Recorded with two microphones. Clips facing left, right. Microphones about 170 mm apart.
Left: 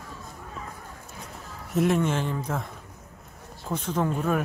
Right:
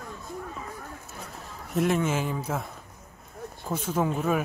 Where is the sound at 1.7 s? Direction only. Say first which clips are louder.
Left 2 dB; centre (ahead or behind).